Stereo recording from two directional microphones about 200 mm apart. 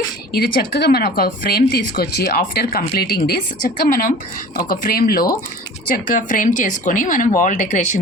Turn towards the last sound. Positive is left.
turn(degrees=40)  # may be behind; listen again after turning